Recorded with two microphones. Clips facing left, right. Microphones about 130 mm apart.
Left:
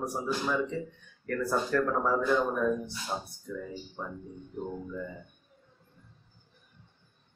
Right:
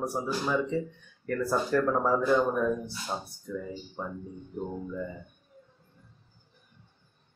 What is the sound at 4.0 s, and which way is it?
Speech, 20° right (ahead or behind).